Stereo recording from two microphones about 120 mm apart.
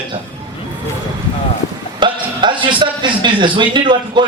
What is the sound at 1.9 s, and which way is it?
A man's voice, 40° right (ahead or behind).